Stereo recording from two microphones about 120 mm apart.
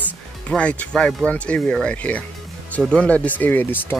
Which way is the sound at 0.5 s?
10° left (ahead or behind).